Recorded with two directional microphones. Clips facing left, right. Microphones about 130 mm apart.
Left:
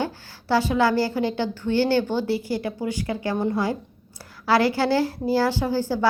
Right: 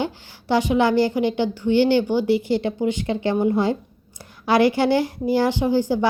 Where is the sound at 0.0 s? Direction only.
15° right (ahead or behind).